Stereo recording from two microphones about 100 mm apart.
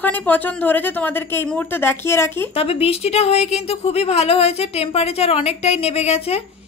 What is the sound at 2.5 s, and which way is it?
A woman's voice, 80° left.